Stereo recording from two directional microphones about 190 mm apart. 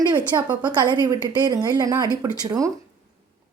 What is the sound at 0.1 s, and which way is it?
A woman's voice, 20° right (ahead or behind).